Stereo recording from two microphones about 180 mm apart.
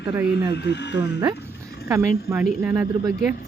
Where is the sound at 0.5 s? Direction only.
70° left (ahead or behind).